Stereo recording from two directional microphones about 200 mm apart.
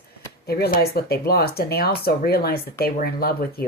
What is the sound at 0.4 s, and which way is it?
Speech, 50° left (ahead or behind).